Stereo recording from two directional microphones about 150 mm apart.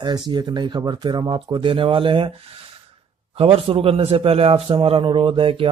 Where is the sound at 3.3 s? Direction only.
40° right (ahead or behind).